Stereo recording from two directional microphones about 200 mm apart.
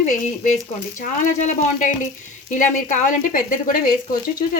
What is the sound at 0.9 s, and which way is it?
Speech, 40° left (ahead or behind).